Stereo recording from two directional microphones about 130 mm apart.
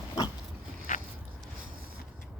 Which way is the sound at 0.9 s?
80° left.